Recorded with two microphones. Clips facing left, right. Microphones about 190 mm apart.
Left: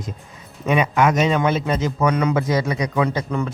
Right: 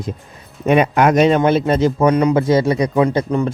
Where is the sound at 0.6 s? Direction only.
60° right (ahead or behind).